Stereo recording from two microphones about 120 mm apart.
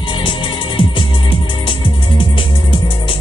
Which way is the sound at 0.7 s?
45° left (ahead or behind).